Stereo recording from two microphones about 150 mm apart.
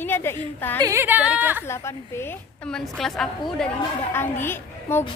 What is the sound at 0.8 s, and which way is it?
Speech, 15° right (ahead or behind).